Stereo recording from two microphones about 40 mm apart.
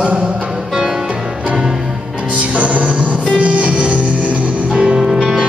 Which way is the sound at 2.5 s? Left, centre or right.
Right.